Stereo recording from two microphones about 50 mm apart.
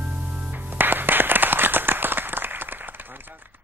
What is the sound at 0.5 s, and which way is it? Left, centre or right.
Clapping, right.